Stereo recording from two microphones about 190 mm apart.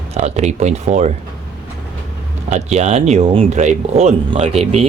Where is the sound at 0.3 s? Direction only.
35° right (ahead or behind).